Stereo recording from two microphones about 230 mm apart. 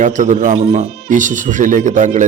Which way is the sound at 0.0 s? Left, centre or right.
Right.